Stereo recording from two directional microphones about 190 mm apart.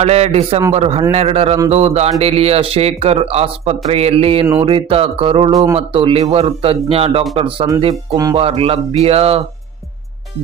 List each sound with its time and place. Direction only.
0.0 s speech: 35° right (ahead or behind)
8.1 s speech: 20° right (ahead or behind)
8.4 s speech: 30° right (ahead or behind)